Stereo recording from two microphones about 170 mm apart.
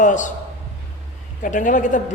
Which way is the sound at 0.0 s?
45° left (ahead or behind).